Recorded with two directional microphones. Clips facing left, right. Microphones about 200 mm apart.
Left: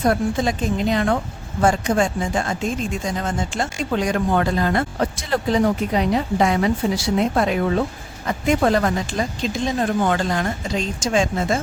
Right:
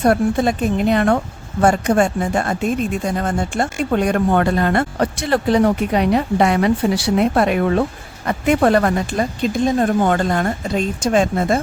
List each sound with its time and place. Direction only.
0.0 s speech: 60° right (ahead or behind)